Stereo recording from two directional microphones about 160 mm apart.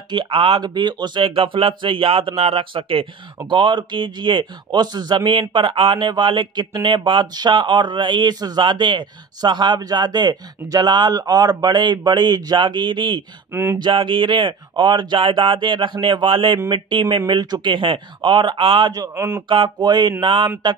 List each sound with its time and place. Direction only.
0.1 s a man's voice: 35° right (ahead or behind)
13.5 s speech: 15° right (ahead or behind)
13.7 s a man's voice: 30° right (ahead or behind)
19.5 s a man's voice: 30° right (ahead or behind)